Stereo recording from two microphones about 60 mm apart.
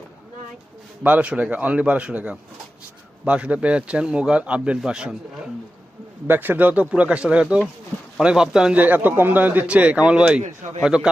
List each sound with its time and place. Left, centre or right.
1.0 s speech: right
6.2 s speech: right; by 8.7 s centre
8.7 s speech: right